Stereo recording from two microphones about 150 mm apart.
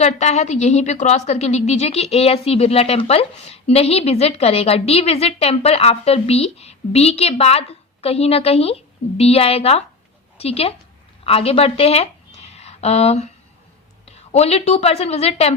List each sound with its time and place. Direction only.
0.0 s a woman's voice: 50° left (ahead or behind)